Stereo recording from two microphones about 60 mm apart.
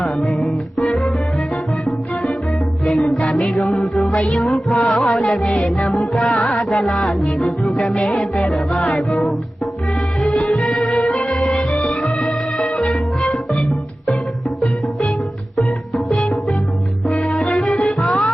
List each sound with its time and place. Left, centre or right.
0.0 s music: centre
2.8 s music: centre
4.7 s music: centre
4.9 s music: centre
5.9 s music: centre
10.5 s music: centre
16.0 s music: centre